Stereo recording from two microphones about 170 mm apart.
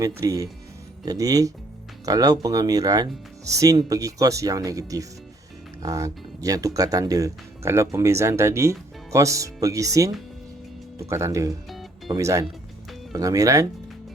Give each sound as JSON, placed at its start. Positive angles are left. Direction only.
{"t": 0.0, "sound": "speech", "side_deg": -20}
{"t": 11.1, "sound": "speech", "side_deg": -15}